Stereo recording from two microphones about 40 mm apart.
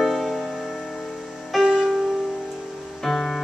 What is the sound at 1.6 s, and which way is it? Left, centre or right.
Music, centre.